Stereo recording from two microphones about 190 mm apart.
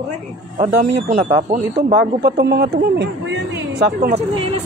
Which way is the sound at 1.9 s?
60° right (ahead or behind).